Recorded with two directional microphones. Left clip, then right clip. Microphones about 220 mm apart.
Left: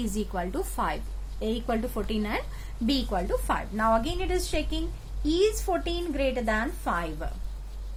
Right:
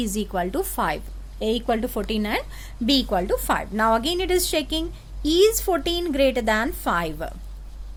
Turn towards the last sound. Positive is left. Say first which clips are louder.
# right 6 dB
turn(degrees=-45)  # may be behind; listen again after turning